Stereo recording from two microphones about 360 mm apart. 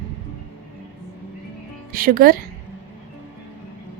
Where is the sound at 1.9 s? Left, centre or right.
Right.